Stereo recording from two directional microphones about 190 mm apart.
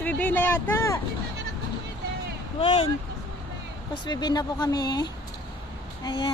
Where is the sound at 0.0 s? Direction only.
10° left (ahead or behind).